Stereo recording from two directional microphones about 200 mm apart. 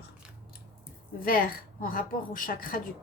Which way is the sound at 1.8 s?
45° left (ahead or behind).